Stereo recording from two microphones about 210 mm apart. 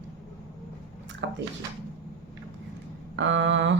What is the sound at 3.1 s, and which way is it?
Speech, 60° right (ahead or behind).